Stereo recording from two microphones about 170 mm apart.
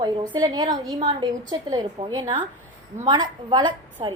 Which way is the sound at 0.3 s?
25° right (ahead or behind).